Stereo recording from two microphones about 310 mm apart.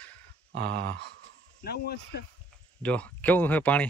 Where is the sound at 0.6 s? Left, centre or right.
Right.